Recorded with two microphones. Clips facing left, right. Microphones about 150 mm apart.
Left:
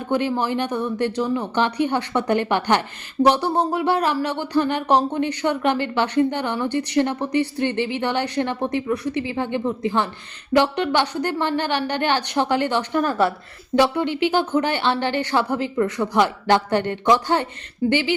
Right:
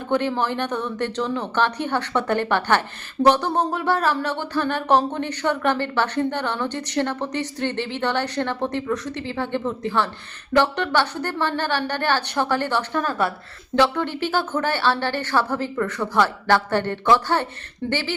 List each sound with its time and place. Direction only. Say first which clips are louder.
0.1 s speech: left 1 dB; 10° left (ahead or behind)